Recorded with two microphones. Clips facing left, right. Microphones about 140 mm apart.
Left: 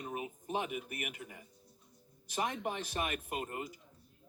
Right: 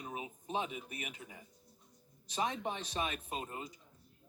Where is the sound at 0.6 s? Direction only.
65° left (ahead or behind).